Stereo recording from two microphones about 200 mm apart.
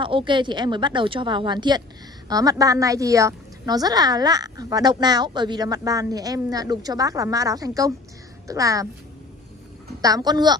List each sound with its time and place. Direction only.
0.0 s a woman's voice: 25° right (ahead or behind)
10.0 s a woman's voice: 20° right (ahead or behind)